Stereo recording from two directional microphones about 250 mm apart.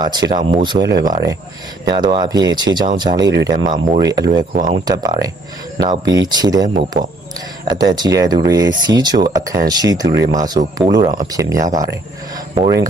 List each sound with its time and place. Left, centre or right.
0.0 s speech: centre